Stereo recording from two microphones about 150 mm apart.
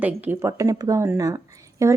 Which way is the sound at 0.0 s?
10° right (ahead or behind).